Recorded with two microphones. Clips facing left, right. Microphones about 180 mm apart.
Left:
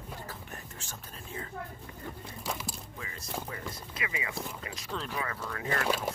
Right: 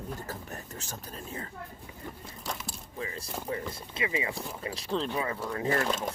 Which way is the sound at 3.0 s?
30° right (ahead or behind).